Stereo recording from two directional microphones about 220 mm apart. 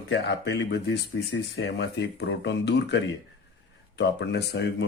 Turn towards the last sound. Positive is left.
turn(degrees=50)  # may be behind; listen again after turning